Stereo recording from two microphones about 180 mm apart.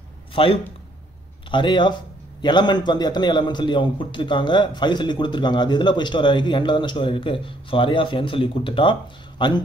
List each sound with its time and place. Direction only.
0.3 s a man's voice: 30° left (ahead or behind)